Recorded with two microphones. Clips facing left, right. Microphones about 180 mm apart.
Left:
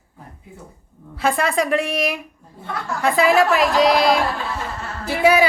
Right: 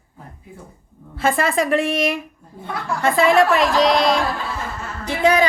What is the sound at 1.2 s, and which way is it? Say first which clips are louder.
A woman's voice: right 1 dB; centre (ahead or behind).